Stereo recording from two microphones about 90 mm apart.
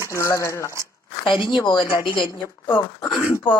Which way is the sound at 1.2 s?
70° left (ahead or behind).